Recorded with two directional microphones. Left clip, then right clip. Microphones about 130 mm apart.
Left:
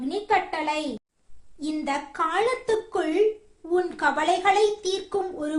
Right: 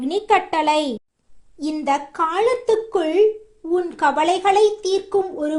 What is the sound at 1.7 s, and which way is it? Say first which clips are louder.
A woman's voice: right 7 dB; 30° right (ahead or behind).